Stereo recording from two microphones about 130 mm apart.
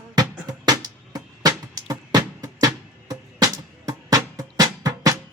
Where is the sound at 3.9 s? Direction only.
30° right (ahead or behind).